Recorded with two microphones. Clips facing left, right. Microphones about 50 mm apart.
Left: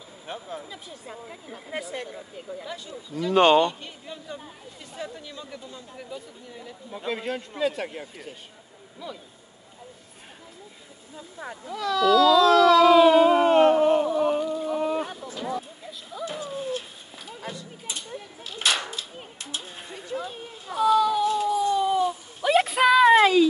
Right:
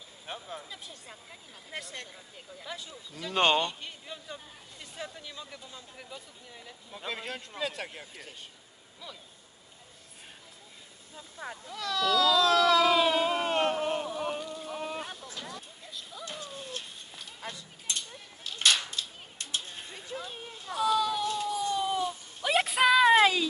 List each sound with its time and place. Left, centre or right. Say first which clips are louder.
0.5 s speech: left 5 dB; centre
1.1 s speech: left 10 dB; left
5.0 s speech: left 5 dB; centre
7.1 s speech: left 8 dB; centre
11.1 s a sound: left 3 dB; centre